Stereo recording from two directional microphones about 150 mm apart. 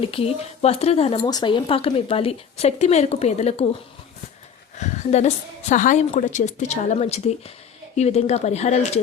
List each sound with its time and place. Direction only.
0.0 s speech: 40° left (ahead or behind)
1.2 s speech: 25° left (ahead or behind); by 3.7 s 45° left (ahead or behind)
4.8 s a woman's voice: 50° left (ahead or behind)